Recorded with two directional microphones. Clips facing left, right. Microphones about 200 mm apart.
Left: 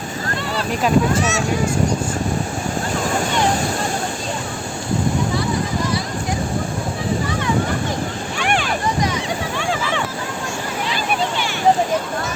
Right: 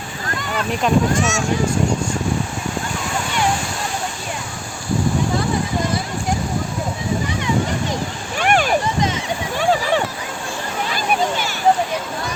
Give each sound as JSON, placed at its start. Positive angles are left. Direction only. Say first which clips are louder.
{"t": 0.7, "sound": "speech", "louder": "right 1 dB", "side_deg": 0}
{"t": 1.2, "sound": "speech", "louder": "even", "side_deg": 35}
{"t": 8.4, "sound": "a sound", "louder": "right 5 dB", "side_deg": -45}